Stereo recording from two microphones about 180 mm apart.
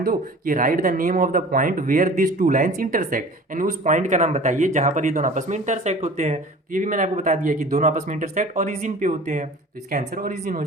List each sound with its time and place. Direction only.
0.0 s speech: 50° right (ahead or behind)